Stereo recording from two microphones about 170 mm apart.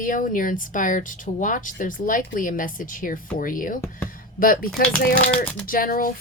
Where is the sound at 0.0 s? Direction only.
55° left (ahead or behind).